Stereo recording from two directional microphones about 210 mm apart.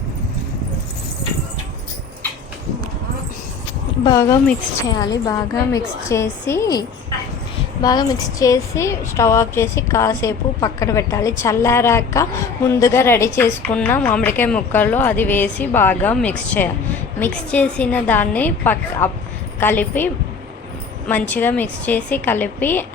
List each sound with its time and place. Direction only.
4.0 s a woman's voice: 15° left (ahead or behind)
21.1 s a woman's voice: 10° left (ahead or behind)